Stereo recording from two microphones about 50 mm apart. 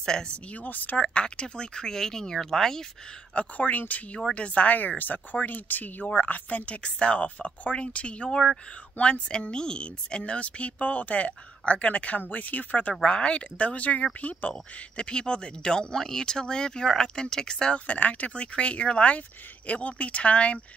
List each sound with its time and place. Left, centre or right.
0.0 s speech: centre
0.6 s speech: left
0.9 s speech: left
3.3 s speech: left
13.0 s speech: left
14.5 s speech: centre
17.8 s speech: left
18.3 s speech: left